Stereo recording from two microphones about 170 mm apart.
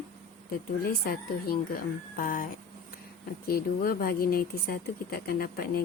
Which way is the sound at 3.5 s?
60° left (ahead or behind).